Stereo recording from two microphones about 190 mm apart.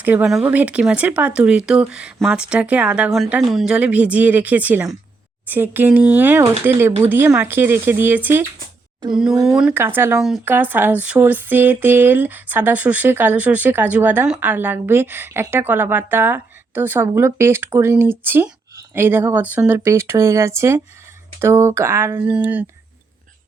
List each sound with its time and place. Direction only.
0.0 s speech: 10° right (ahead or behind)
9.6 s speech: 10° right (ahead or behind)